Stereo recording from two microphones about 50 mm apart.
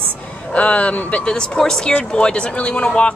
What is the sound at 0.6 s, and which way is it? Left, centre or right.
Speech, left.